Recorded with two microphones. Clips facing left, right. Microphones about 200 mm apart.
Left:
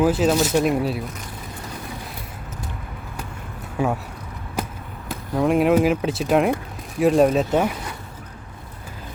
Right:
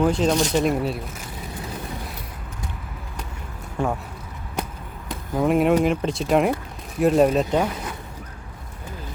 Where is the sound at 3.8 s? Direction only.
5° left (ahead or behind).